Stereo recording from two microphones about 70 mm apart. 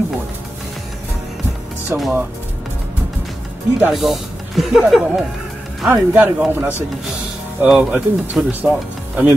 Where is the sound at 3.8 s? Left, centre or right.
Centre.